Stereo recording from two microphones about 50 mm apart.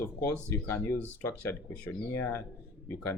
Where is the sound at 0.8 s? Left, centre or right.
Left.